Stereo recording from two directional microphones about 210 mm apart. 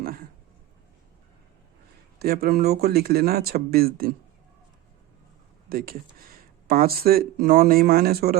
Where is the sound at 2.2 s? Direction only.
45° right (ahead or behind).